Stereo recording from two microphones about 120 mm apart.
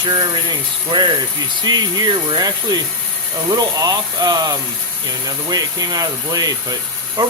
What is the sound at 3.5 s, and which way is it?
Speech, 30° right (ahead or behind).